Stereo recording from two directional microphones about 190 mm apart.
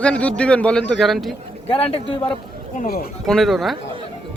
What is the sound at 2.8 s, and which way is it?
Speech, 50° left (ahead or behind).